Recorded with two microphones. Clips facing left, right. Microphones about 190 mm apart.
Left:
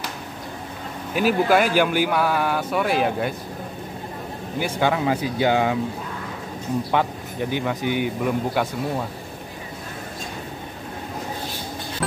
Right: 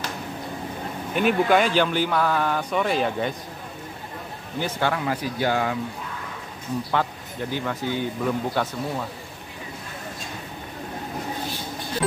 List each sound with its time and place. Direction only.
1.1 s speech: 5° left (ahead or behind)
4.6 s speech: 10° left (ahead or behind)
6.9 s speech: 15° left (ahead or behind)